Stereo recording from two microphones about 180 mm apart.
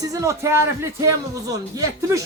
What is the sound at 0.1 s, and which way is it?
A man's voice, 15° right (ahead or behind).